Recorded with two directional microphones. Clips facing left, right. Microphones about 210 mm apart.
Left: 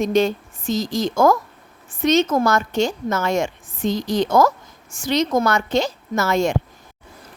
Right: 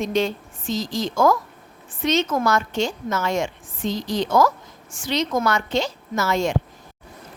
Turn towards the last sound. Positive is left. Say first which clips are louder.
# left 3 dB
turn(degrees=50)  # may be behind; listen again after turning